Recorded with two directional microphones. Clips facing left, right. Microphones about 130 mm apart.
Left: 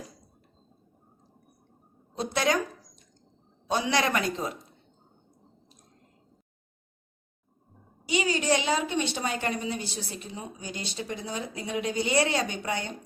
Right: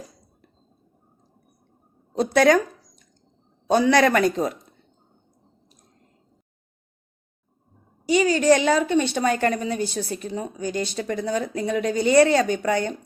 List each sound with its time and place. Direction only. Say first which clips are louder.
2.1 s a woman's voice: right 10 dB; 55° right (ahead or behind)
3.7 s a woman's voice: right 9 dB; 45° right (ahead or behind)
8.0 s a woman's voice: right 9 dB; 45° right (ahead or behind)